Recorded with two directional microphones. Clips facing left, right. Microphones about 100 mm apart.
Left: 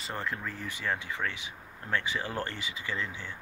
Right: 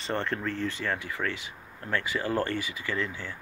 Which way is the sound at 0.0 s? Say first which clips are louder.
Right 5 dB; 5° left (ahead or behind).